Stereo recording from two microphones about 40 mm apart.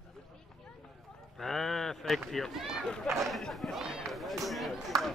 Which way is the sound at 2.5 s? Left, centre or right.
Centre.